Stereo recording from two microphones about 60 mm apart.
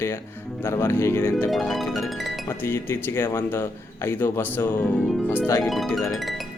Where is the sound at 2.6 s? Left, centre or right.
Left.